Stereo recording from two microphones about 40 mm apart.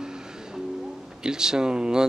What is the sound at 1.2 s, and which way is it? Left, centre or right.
Speech, centre.